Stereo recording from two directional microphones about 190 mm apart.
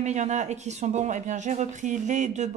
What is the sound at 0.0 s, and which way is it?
Speech, 40° right (ahead or behind).